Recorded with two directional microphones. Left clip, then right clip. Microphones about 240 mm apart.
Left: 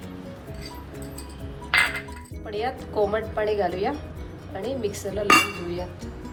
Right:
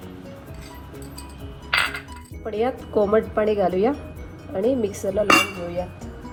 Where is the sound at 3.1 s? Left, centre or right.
Right.